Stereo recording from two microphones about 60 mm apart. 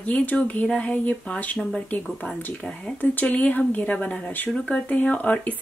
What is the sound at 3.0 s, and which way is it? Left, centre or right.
Speech, left.